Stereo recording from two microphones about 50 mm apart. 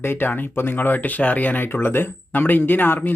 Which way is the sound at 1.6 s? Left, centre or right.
Left.